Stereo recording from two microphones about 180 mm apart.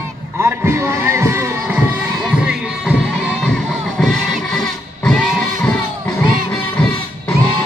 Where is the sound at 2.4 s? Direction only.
5° right (ahead or behind).